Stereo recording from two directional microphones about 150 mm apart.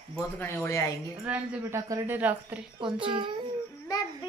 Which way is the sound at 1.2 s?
15° right (ahead or behind).